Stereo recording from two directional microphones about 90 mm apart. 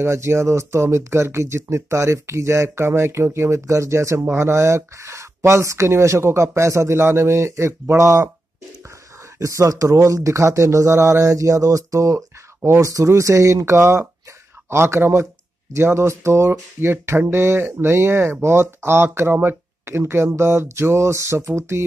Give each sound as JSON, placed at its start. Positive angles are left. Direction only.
{"t": 0.0, "sound": "speech", "side_deg": -30}
{"t": 9.4, "sound": "speech", "side_deg": -35}
{"t": 14.7, "sound": "a sound", "side_deg": -30}